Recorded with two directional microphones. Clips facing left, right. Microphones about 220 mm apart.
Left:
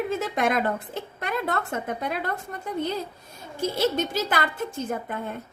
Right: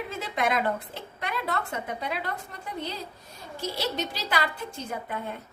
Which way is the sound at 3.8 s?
50° left (ahead or behind).